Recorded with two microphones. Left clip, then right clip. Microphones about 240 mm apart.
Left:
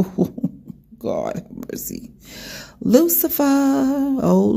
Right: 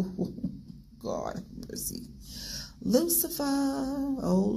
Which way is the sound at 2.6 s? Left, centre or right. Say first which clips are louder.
Left 12 dB; left.